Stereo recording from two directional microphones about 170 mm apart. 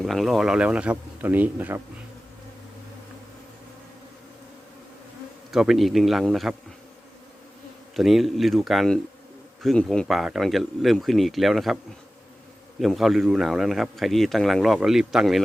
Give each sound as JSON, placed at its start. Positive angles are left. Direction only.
{"t": 0.0, "sound": "speech", "side_deg": 0}
{"t": 5.5, "sound": "speech", "side_deg": 0}
{"t": 7.9, "sound": "speech", "side_deg": 0}
{"t": 12.8, "sound": "speech", "side_deg": 0}